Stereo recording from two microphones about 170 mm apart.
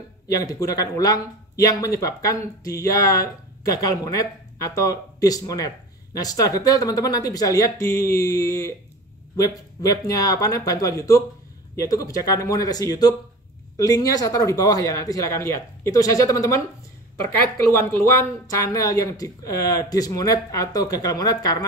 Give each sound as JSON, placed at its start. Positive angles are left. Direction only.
{"t": 0.4, "sound": "speech", "side_deg": 20}
{"t": 17.7, "sound": "speech", "side_deg": 15}